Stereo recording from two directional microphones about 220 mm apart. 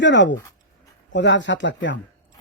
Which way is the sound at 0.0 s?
55° left (ahead or behind).